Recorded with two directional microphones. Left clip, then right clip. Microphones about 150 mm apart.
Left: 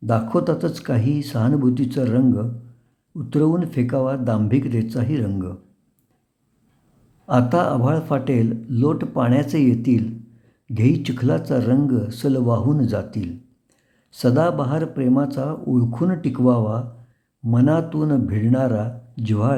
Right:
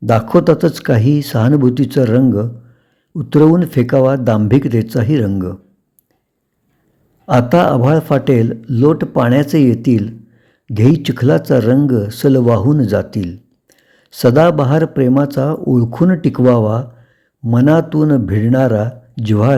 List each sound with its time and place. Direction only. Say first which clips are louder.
0.0 s speech: right 9 dB; 40° right (ahead or behind)
7.3 s speech: right 7 dB; 35° right (ahead or behind)